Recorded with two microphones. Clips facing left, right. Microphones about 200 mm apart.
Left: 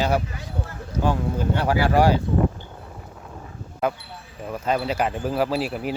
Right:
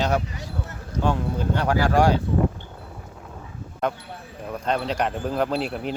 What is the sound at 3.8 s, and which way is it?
Speech, 5° left (ahead or behind).